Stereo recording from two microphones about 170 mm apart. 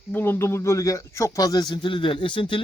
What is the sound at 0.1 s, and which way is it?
A man's voice, 15° left (ahead or behind).